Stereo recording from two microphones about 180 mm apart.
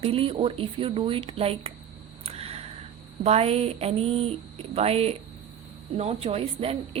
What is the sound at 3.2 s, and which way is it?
A woman's voice, 35° right (ahead or behind).